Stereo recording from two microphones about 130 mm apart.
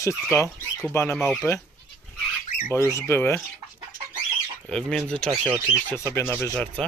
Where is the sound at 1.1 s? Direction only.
Centre (ahead or behind).